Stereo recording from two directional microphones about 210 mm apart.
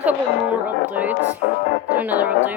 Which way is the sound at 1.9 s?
10° right (ahead or behind).